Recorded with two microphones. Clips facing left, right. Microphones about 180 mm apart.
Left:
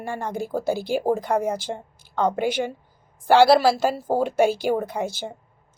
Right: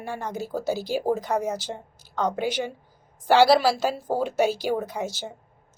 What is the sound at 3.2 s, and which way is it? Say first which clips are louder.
A woman's voice: left 2 dB; 50° left (ahead or behind).